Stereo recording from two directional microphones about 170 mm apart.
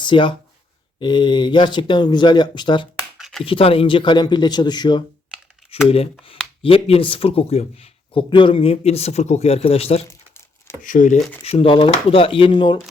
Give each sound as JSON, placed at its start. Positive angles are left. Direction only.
{"t": 0.0, "sound": "speech", "side_deg": 30}
{"t": 3.2, "sound": "a sound", "side_deg": 0}
{"t": 3.4, "sound": "speech", "side_deg": 35}
{"t": 10.1, "sound": "crumpling", "side_deg": 15}
{"t": 10.8, "sound": "speech", "side_deg": 50}
{"t": 11.4, "sound": "speech", "side_deg": 35}